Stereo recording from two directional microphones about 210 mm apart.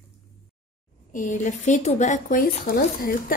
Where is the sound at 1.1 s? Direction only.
35° left (ahead or behind).